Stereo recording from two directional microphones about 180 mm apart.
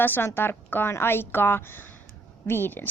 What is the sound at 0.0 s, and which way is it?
Speech, 10° left (ahead or behind).